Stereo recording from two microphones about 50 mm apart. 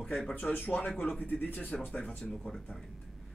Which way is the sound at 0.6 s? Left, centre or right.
Left.